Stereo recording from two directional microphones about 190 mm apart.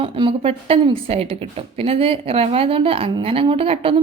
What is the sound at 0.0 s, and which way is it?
Speech, 25° right (ahead or behind).